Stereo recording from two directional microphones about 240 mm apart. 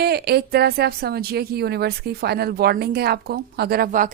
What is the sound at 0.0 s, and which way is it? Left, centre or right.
Speech, right.